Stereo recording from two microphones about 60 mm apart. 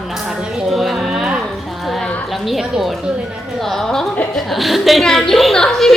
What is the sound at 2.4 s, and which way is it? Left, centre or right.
A woman's voice, centre.